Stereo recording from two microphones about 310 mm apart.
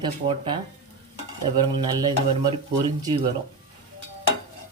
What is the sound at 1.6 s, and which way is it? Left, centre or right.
Speech, centre.